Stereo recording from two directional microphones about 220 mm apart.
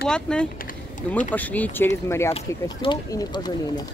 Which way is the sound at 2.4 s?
20° left (ahead or behind).